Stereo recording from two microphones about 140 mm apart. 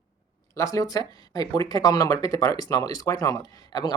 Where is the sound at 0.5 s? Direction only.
25° left (ahead or behind).